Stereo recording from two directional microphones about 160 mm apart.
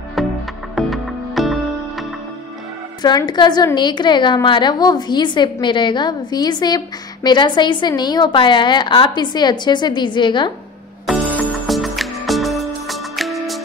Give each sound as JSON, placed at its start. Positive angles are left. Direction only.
{"t": 0.2, "sound": "music", "side_deg": 0}
{"t": 3.0, "sound": "a woman's voice", "side_deg": 25}
{"t": 11.3, "sound": "music", "side_deg": 5}